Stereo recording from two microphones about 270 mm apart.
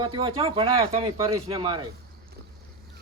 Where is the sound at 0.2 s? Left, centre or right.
Centre.